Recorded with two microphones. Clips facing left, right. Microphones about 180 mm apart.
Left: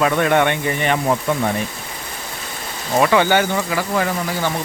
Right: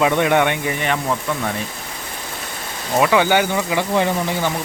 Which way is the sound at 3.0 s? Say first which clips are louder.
Even; 10° right (ahead or behind).